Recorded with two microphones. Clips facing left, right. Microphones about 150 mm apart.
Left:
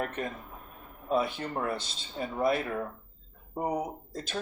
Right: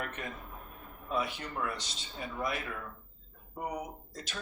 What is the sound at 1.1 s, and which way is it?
Speech, 30° left (ahead or behind).